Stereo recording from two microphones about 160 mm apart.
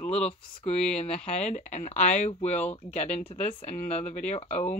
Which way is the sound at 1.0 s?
5° left (ahead or behind).